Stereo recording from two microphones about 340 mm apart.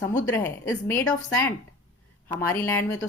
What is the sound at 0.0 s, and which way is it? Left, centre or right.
Speech, left.